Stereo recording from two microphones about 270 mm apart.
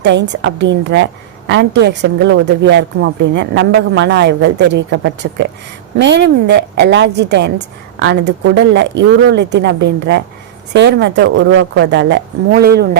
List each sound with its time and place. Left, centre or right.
0.0 s a woman's voice: right